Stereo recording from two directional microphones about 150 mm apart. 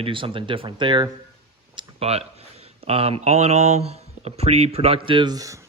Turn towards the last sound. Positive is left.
turn(degrees=-25)  # may be behind; listen again after turning